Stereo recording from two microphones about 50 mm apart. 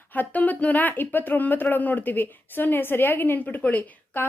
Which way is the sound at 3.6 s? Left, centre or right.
Left.